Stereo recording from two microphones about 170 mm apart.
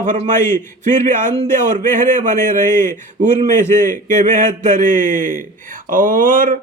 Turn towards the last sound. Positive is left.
turn(degrees=-55)  # may be behind; listen again after turning